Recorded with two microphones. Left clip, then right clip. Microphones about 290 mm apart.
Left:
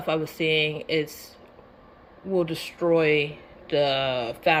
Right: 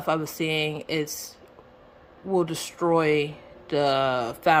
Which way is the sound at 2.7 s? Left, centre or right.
Right.